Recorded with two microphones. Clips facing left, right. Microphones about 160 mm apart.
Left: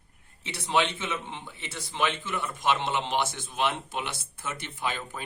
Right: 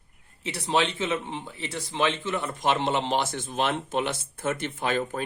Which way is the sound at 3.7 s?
50° right (ahead or behind).